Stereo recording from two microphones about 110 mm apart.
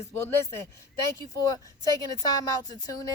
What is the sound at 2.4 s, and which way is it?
Speech, 35° left (ahead or behind).